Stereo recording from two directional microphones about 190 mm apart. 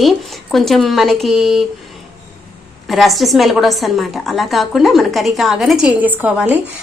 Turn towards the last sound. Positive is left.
turn(degrees=-10)  # may be behind; listen again after turning